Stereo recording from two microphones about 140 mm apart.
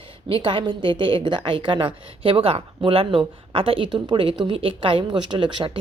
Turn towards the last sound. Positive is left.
turn(degrees=-35)  # may be behind; listen again after turning